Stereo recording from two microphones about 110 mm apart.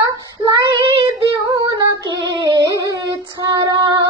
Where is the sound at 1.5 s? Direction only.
35° right (ahead or behind).